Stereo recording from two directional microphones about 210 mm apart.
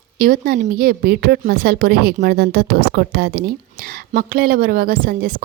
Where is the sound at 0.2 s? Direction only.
45° right (ahead or behind).